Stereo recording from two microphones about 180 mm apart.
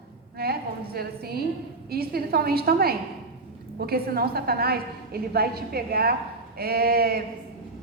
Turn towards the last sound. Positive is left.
turn(degrees=-60)  # may be behind; listen again after turning